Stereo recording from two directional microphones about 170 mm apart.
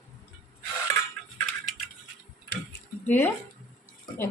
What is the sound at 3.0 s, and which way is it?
Speech, 10° left (ahead or behind).